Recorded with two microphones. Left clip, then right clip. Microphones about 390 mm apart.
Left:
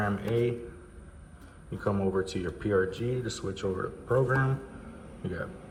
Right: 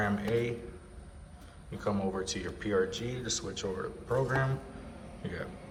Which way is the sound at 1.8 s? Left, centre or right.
Centre.